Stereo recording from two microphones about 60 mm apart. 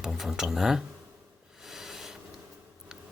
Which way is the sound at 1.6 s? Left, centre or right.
Centre.